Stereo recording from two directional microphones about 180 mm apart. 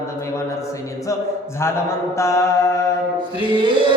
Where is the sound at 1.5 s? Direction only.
15° left (ahead or behind).